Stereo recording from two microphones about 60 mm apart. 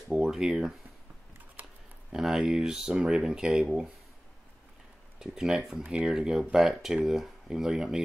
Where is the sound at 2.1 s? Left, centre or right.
Centre.